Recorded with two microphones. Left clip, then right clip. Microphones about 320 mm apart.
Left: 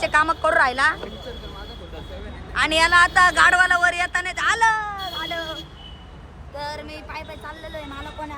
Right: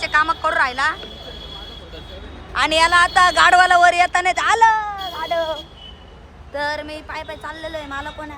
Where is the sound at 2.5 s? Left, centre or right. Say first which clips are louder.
Right 2 dB; centre.